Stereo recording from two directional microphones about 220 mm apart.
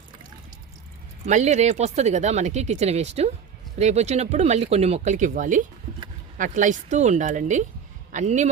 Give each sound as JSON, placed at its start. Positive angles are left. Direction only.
{"t": 1.2, "sound": "speech", "side_deg": -30}